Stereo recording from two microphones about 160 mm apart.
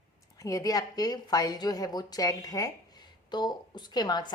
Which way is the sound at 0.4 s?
20° left (ahead or behind).